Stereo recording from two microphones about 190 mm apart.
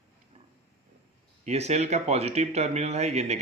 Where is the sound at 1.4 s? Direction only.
35° right (ahead or behind).